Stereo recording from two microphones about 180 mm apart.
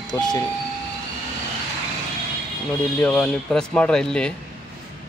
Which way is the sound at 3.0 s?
5° left (ahead or behind).